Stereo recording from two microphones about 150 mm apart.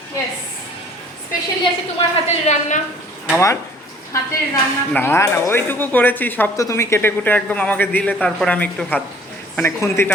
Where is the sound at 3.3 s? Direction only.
20° left (ahead or behind).